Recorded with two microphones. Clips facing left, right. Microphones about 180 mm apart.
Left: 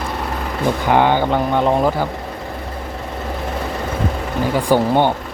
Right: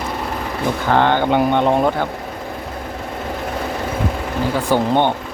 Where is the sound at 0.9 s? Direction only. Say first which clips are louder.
Even; 10° left (ahead or behind).